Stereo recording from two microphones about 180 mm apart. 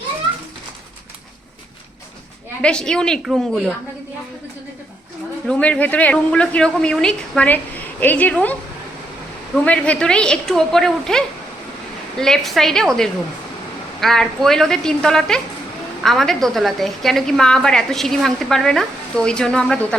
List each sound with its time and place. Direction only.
2.6 s a woman's voice: 5° left (ahead or behind)
5.5 s speech: 5° left (ahead or behind)
9.6 s a woman's voice: 5° left (ahead or behind)